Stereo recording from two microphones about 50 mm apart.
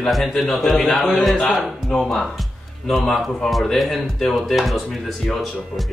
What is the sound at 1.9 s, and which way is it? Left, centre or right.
Speech, centre.